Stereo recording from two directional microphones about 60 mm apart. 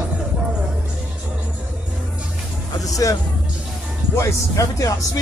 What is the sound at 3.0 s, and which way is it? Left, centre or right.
Speech, left.